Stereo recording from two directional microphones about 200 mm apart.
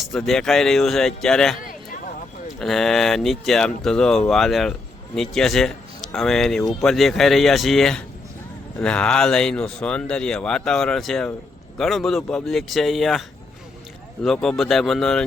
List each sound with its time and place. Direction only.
0.0 s speech: centre (ahead or behind)
2.6 s speech: centre (ahead or behind)